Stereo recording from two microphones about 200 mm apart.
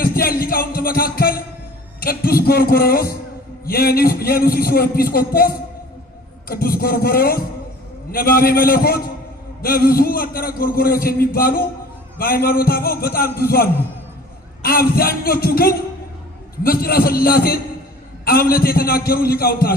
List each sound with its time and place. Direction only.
0.0 s music: 45° left (ahead or behind)
2.0 s a man's voice: 50° left (ahead or behind)